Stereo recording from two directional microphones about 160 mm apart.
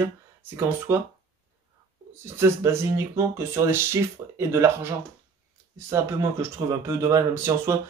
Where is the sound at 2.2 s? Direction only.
15° right (ahead or behind).